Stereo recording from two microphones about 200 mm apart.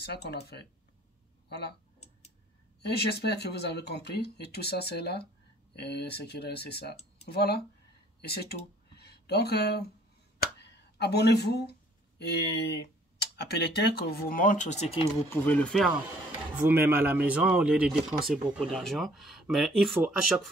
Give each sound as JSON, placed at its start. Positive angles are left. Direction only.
{"t": 0.0, "sound": "speech", "side_deg": 55}
{"t": 2.8, "sound": "speech", "side_deg": 55}
{"t": 8.9, "sound": "a sound", "side_deg": 55}
{"t": 12.2, "sound": "speech", "side_deg": 55}
{"t": 15.2, "sound": "speech", "side_deg": 10}
{"t": 16.6, "sound": "speech", "side_deg": -10}